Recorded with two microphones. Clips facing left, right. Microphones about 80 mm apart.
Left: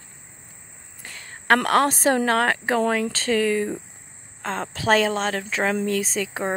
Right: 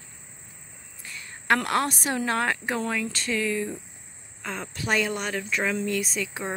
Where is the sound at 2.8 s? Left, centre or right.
Left.